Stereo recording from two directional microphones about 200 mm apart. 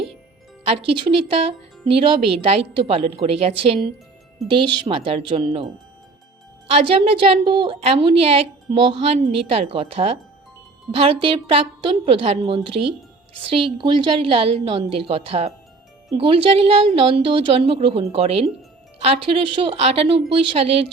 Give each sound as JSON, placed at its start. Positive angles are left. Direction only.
{"t": 0.6, "sound": "a woman's voice", "side_deg": -25}
{"t": 6.7, "sound": "a woman's voice", "side_deg": -30}